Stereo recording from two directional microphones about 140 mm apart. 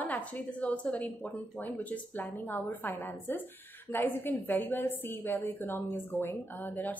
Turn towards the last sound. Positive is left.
turn(degrees=15)  # may be behind; listen again after turning